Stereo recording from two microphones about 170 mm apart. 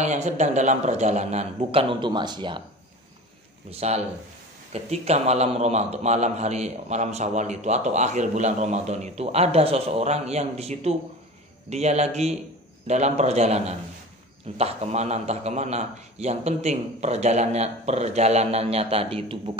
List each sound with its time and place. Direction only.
0.0 s a man's voice: 40° right (ahead or behind); by 2.6 s 25° right (ahead or behind)
3.7 s a man's voice: 40° right (ahead or behind)